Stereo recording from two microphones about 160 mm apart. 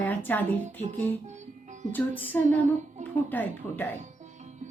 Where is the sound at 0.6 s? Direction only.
40° right (ahead or behind).